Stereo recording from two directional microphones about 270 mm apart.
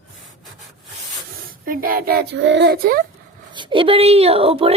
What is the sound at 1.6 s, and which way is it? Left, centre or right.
Speech, right.